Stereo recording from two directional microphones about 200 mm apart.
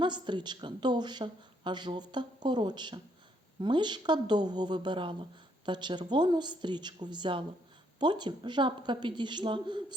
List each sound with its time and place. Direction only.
0.0 s a woman's voice: 25° right (ahead or behind)